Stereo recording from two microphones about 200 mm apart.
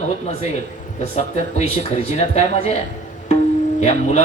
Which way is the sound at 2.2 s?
30° left (ahead or behind).